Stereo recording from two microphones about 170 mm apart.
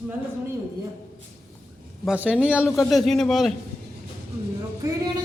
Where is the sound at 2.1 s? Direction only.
10° right (ahead or behind).